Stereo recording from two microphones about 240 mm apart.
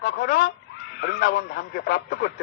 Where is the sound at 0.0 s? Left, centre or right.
Left.